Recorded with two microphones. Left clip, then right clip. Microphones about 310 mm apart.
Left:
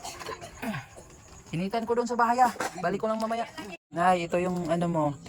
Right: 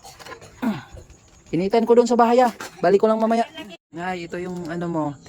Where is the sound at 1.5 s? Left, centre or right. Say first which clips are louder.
Right 12 dB; right.